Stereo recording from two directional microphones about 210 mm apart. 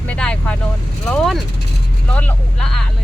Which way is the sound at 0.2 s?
5° left (ahead or behind).